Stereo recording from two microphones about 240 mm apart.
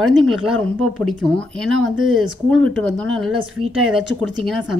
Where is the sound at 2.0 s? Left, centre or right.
Centre.